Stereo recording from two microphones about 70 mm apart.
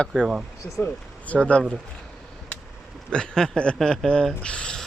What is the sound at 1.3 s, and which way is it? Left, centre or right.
Speech, centre.